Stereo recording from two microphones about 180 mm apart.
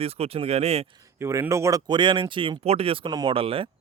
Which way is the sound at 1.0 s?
15° right (ahead or behind).